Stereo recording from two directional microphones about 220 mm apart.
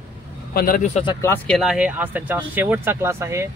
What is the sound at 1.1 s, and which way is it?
Speech, 10° left (ahead or behind).